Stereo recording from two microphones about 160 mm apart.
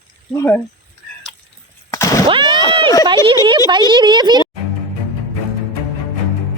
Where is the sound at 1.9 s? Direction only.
20° left (ahead or behind).